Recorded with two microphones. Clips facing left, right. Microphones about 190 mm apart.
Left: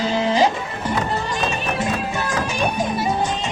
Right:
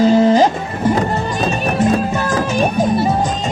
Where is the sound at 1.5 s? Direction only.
40° right (ahead or behind).